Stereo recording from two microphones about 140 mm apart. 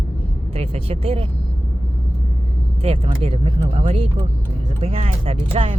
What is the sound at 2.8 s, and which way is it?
Speech, 45° right (ahead or behind).